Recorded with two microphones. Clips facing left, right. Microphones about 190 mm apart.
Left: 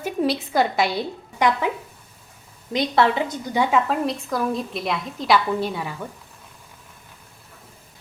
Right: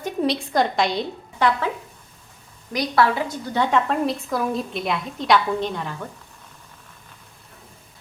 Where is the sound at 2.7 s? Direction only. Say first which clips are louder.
Left 1 dB; 25° left (ahead or behind); by 6.0 s 10° left (ahead or behind).